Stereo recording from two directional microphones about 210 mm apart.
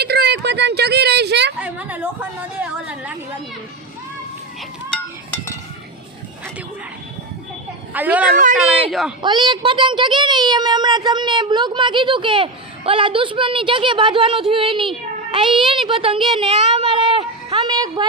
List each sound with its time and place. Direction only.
0.0 s a woman's voice: 50° right (ahead or behind)
1.5 s a woman's voice: 5° right (ahead or behind)
7.9 s a woman's voice: 5° right (ahead or behind)
9.2 s a woman's voice: 20° right (ahead or behind)
16.3 s a sound: 25° right (ahead or behind)
17.7 s a woman's voice: 20° right (ahead or behind)